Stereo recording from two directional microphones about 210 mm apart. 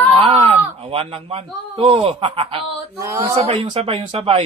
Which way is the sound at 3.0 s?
15° right (ahead or behind).